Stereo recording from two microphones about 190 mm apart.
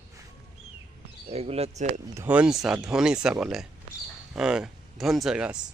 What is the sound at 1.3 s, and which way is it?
Speech, 30° right (ahead or behind).